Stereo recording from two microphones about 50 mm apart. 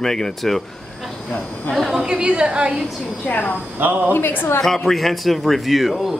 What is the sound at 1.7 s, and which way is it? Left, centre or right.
Speech, centre.